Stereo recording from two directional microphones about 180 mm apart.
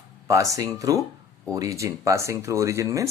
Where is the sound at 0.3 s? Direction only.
20° right (ahead or behind).